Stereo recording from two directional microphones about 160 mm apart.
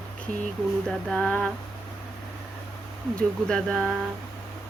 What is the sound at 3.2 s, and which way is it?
Speech, 5° left (ahead or behind).